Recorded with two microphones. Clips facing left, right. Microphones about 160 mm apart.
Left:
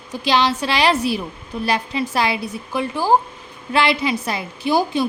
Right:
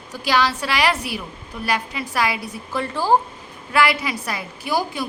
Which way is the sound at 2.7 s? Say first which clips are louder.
Left 1 dB; 15° left (ahead or behind).